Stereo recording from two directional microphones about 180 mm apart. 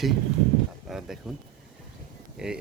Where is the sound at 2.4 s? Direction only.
5° right (ahead or behind).